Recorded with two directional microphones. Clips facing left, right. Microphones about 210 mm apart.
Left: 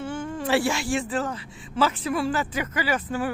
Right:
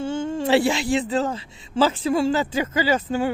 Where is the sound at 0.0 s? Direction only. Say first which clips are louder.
Right 5 dB; 25° right (ahead or behind).